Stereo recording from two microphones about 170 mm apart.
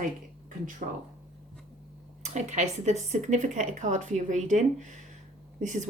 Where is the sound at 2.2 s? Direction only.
45° right (ahead or behind).